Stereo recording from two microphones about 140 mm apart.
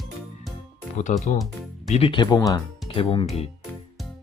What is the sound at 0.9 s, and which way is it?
Speech, 60° left (ahead or behind).